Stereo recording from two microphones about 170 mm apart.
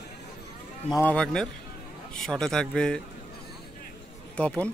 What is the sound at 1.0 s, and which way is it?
A man's voice, 5° left (ahead or behind).